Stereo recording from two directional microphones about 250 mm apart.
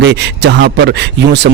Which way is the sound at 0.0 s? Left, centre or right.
Right.